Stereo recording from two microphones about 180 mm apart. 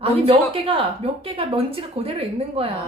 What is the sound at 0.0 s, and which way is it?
A woman's voice, 30° right (ahead or behind).